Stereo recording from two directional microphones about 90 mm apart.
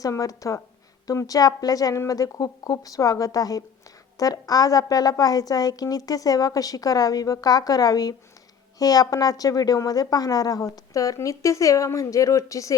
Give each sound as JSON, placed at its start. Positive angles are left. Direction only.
{"t": 0.0, "sound": "a woman's voice", "side_deg": 40}